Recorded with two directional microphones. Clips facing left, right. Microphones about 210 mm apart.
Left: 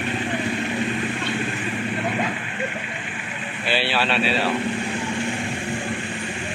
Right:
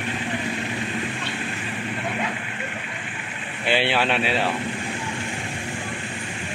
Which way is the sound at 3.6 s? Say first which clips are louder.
Right 2 dB; 20° right (ahead or behind).